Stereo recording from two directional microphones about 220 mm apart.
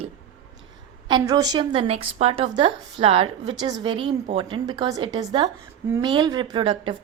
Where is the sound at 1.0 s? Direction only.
20° right (ahead or behind).